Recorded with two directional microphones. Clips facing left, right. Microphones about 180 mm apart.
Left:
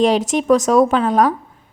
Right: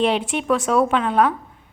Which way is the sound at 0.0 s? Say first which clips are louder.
Left 5 dB; 40° left (ahead or behind).